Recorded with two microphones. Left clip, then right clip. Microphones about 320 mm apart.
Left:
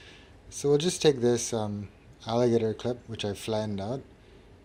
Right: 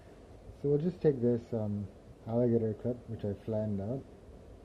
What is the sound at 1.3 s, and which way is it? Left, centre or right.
Speech, centre.